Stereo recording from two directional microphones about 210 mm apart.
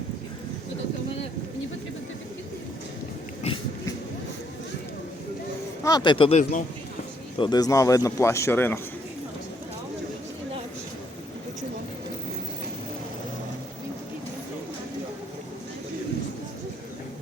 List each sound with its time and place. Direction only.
5.8 s speech: 20° left (ahead or behind)